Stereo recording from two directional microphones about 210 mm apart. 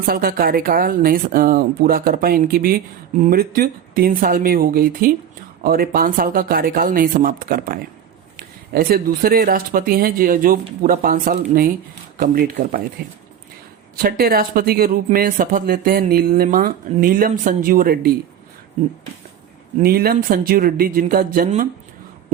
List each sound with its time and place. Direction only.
0.0 s speech: 45° right (ahead or behind)
13.9 s speech: 45° right (ahead or behind)
19.8 s speech: 45° right (ahead or behind)